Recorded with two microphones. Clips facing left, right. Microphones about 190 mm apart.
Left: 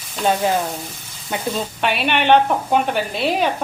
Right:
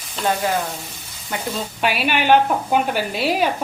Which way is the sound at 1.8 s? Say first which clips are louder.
Even; 5° right (ahead or behind).